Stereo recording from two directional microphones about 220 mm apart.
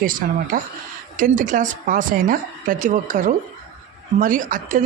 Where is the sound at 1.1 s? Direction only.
35° right (ahead or behind).